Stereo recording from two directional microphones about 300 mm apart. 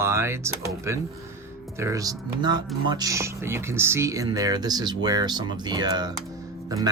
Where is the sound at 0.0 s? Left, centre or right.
Centre.